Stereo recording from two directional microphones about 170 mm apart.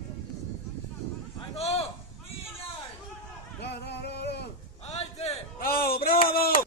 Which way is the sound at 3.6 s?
80° left.